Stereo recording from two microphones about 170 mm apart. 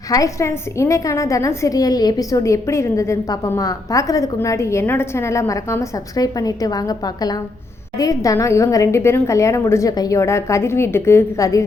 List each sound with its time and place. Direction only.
0.1 s a woman's voice: 20° left (ahead or behind)